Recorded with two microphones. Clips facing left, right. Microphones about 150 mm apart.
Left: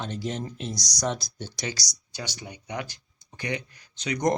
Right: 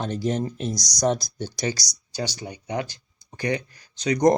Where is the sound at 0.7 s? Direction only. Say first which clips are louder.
Right 4 dB; 15° right (ahead or behind).